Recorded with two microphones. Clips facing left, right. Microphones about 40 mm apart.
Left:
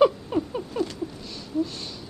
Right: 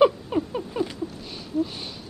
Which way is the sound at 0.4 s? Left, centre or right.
Centre.